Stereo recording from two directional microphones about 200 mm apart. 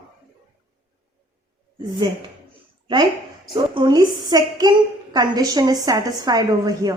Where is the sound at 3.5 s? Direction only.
25° right (ahead or behind).